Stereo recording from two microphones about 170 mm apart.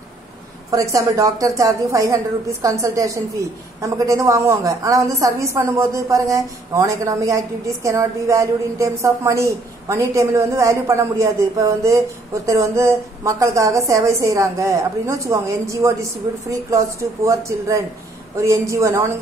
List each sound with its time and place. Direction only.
0.7 s a woman's voice: 20° right (ahead or behind)